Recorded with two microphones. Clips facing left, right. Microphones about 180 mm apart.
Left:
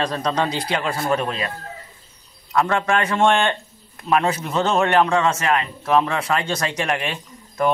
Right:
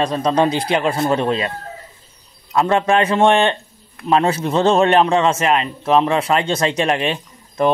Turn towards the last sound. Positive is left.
turn(degrees=-25)  # may be behind; listen again after turning